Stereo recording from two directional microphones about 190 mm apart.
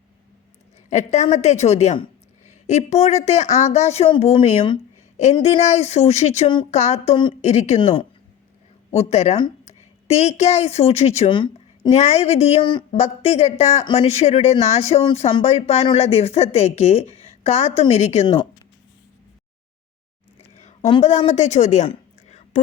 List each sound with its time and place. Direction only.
0.9 s a woman's voice: 35° left (ahead or behind)
11.9 s a woman's voice: 35° left (ahead or behind)
21.0 s a woman's voice: 35° left (ahead or behind)